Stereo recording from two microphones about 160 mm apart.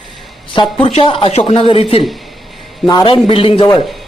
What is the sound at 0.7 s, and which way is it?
Speech, 35° left (ahead or behind).